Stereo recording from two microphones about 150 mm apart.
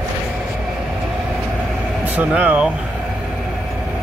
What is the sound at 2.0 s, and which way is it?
Speech, 10° right (ahead or behind).